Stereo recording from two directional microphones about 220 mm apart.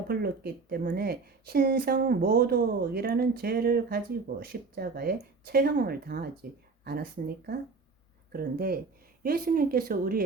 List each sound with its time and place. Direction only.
0.1 s a woman's voice: 45° right (ahead or behind)
8.3 s a woman's voice: 45° right (ahead or behind)